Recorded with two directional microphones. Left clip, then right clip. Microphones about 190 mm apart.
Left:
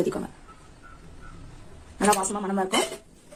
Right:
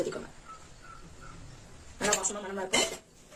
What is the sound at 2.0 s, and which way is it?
Speech, 50° left (ahead or behind).